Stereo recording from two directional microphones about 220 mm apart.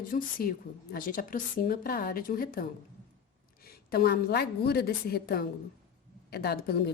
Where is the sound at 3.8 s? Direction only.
45° left (ahead or behind).